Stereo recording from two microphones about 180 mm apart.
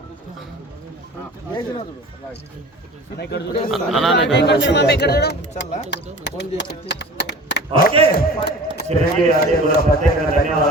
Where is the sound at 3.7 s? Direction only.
Centre (ahead or behind).